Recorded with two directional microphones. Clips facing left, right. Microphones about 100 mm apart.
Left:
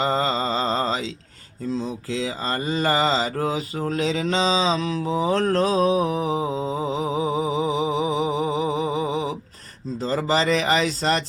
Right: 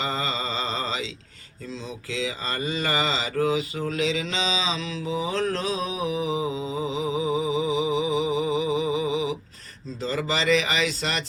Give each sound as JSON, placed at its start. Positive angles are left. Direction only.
{"t": 0.0, "sound": "mantra", "side_deg": 40}
{"t": 10.0, "sound": "speech", "side_deg": 40}